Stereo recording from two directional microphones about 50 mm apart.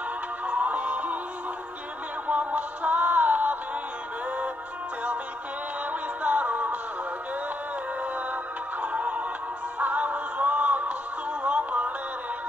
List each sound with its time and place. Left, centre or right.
0.5 s music: right
2.2 s music: right
5.9 s music: right
8.8 s music: right